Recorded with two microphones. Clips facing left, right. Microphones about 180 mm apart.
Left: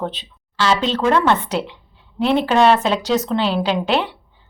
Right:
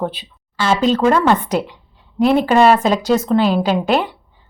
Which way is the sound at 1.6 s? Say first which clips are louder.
Left 1 dB; 45° right (ahead or behind).